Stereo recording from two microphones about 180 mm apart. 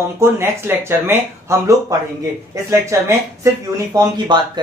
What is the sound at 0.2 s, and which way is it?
Speech, 15° right (ahead or behind).